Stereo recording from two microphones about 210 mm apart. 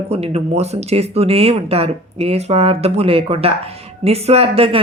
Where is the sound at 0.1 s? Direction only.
30° right (ahead or behind).